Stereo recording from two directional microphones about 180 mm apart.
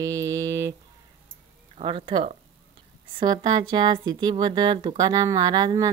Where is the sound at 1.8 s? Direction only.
30° right (ahead or behind).